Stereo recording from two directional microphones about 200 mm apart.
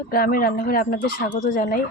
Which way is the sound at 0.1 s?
45° left (ahead or behind).